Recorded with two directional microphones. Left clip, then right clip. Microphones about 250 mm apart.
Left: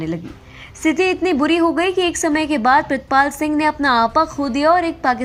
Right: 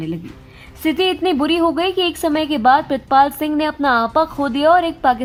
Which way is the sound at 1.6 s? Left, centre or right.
Centre.